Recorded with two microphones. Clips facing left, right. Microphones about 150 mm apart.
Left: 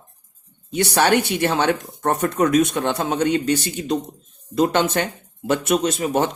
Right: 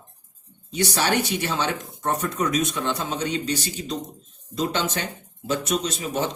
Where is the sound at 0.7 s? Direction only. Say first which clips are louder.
Left 5 dB; 60° left (ahead or behind).